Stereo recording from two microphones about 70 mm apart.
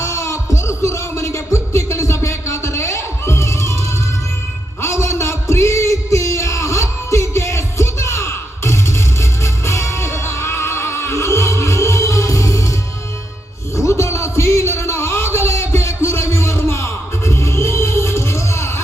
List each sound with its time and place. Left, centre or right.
0.0 s music: left
4.8 s music: left
13.7 s music: left